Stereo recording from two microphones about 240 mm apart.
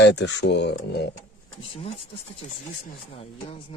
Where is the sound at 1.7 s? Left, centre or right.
Left.